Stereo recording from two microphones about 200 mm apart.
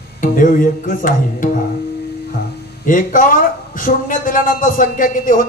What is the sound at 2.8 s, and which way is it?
A man's voice, 40° left (ahead or behind).